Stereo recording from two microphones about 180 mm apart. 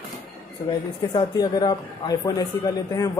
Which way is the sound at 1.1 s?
20° left (ahead or behind).